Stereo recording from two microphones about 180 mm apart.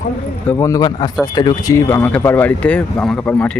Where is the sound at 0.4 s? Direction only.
15° left (ahead or behind).